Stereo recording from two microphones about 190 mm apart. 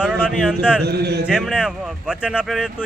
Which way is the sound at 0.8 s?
60° right (ahead or behind).